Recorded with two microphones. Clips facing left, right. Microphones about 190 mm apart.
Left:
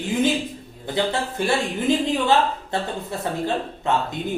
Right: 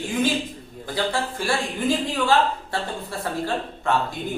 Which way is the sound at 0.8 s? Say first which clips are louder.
Left 2 dB; 20° left (ahead or behind).